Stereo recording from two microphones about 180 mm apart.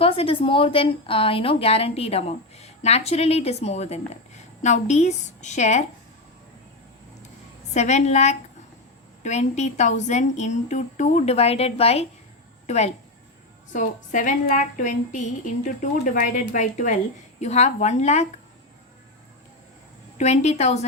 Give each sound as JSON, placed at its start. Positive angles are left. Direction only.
{"t": 0.0, "sound": "a woman's voice", "side_deg": 30}
{"t": 7.7, "sound": "a woman's voice", "side_deg": 40}
{"t": 20.1, "sound": "a woman's voice", "side_deg": 40}